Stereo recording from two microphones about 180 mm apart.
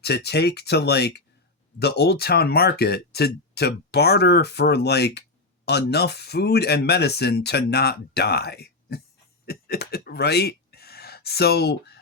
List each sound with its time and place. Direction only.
0.0 s speech: 65° left (ahead or behind)